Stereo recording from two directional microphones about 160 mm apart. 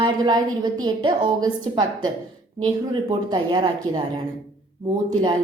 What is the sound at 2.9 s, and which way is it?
A woman's voice, 25° right (ahead or behind).